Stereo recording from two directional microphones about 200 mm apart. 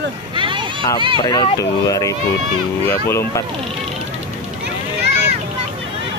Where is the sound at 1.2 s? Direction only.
25° left (ahead or behind).